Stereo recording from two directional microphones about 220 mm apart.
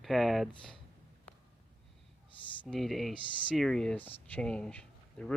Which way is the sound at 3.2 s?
20° left (ahead or behind).